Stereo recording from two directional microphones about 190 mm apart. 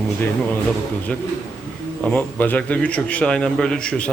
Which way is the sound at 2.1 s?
10° left (ahead or behind).